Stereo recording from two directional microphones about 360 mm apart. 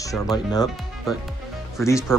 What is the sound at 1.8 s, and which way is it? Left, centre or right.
Speech, centre.